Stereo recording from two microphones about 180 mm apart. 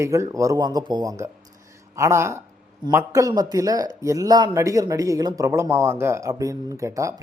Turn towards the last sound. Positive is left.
turn(degrees=-15)  # may be behind; listen again after turning